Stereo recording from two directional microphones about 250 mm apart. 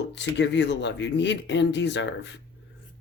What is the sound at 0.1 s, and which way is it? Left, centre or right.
Speech, left.